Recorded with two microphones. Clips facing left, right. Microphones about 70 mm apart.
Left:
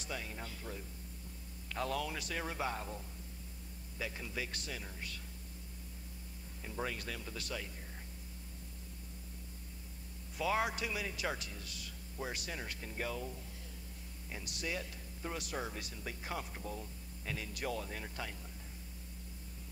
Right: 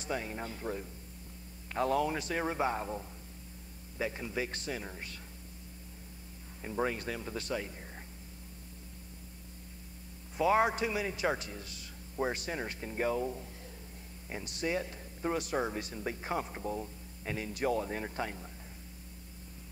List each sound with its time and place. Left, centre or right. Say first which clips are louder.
0.0 s speech: right 7 dB; right
4.0 s speech: right 7 dB; right
6.6 s speech: right 7 dB; right
10.3 s speech: right 7 dB; right